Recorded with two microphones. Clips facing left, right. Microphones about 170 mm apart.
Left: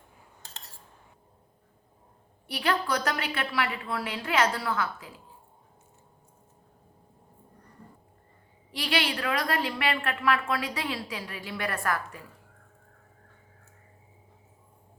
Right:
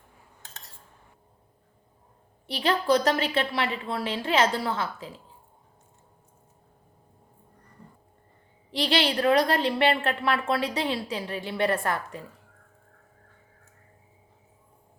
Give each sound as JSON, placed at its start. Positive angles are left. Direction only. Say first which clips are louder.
{"t": 2.5, "sound": "a woman's voice", "louder": "right 5 dB", "side_deg": -25}
{"t": 8.7, "sound": "a woman's voice", "louder": "right 5 dB", "side_deg": -30}